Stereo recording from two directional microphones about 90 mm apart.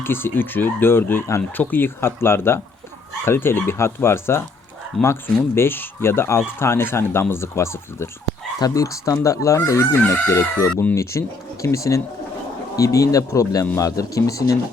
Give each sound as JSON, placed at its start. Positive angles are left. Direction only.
{"t": 0.0, "sound": "speech", "side_deg": 25}
{"t": 4.9, "sound": "speech", "side_deg": 5}
{"t": 5.5, "sound": "speech", "side_deg": 25}